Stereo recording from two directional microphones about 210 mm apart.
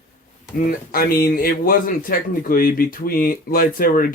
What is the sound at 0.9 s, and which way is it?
A man's voice, 45° left (ahead or behind).